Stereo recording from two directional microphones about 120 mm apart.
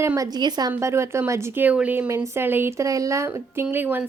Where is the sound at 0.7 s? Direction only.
25° right (ahead or behind).